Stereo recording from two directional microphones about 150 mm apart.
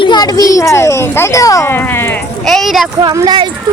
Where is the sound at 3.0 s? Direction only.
30° right (ahead or behind).